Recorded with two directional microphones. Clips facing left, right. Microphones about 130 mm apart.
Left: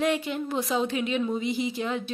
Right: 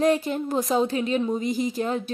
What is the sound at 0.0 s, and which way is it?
A woman's voice, 40° right (ahead or behind).